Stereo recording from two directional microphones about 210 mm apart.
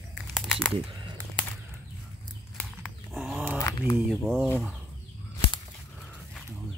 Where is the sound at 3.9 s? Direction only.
Centre (ahead or behind).